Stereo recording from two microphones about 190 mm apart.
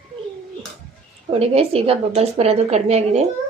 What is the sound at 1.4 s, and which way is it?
A woman's voice, 30° right (ahead or behind).